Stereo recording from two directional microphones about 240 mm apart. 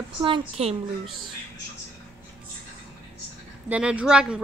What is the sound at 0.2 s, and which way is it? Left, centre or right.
Speech, right.